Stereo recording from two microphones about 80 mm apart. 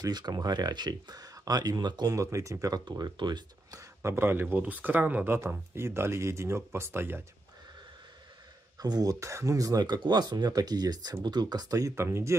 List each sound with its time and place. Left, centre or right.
0.0 s speech: right
2.1 s speech: right
3.2 s speech: right
3.7 s speech: right
5.3 s speech: right
8.7 s speech: right
11.9 s speech: right